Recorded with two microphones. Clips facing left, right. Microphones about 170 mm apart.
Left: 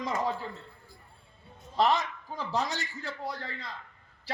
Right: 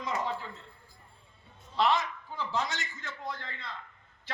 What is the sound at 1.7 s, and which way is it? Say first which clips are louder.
A man's voice: left 1 dB; 40° left (ahead or behind).